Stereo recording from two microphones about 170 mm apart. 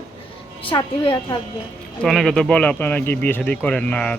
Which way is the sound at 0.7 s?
30° left (ahead or behind).